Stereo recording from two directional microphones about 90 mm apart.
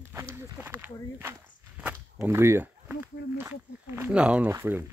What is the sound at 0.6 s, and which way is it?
Speech, 20° right (ahead or behind).